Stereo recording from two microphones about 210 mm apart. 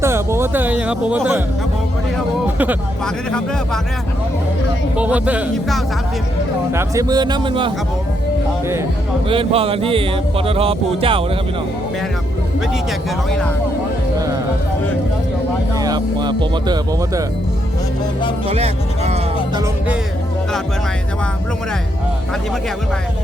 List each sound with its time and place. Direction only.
0.0 s speech: 10° right (ahead or behind)
2.1 s music: 10° right (ahead or behind)
4.9 s speech: 5° right (ahead or behind)
6.7 s speech: 15° right (ahead or behind)
9.3 s speech: 25° right (ahead or behind)
15.8 s speech: 20° right (ahead or behind)
18.4 s speech: 30° right (ahead or behind)